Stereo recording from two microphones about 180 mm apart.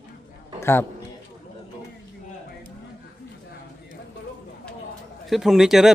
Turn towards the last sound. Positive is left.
turn(degrees=0)  # may be behind; listen again after turning